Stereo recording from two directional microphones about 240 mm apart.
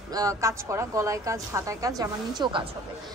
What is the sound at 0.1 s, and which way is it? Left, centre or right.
A woman's voice, centre.